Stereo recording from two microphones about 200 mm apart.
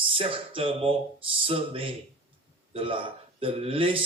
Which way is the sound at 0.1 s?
25° right (ahead or behind).